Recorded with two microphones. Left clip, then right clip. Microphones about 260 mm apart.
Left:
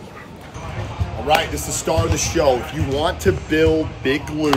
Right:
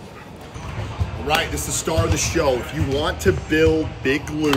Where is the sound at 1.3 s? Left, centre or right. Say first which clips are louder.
Left 3 dB; centre.